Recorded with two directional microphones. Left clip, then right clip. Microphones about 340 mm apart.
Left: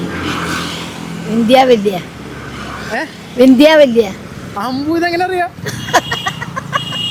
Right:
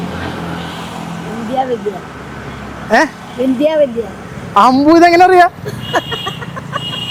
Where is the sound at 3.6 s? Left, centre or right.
Left.